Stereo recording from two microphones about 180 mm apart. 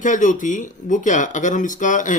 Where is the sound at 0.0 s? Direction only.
45° left (ahead or behind).